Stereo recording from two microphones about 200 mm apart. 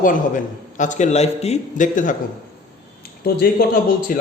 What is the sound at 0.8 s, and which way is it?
Speech, 35° left (ahead or behind).